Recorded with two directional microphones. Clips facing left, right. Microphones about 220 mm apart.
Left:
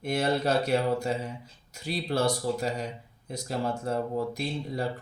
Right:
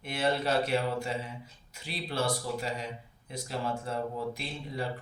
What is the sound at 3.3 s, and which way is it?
Speech, 45° left (ahead or behind).